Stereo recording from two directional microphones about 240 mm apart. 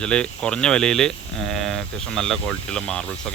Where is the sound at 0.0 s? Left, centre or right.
Centre.